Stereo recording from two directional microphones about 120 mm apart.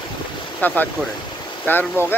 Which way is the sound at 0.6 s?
15° left (ahead or behind).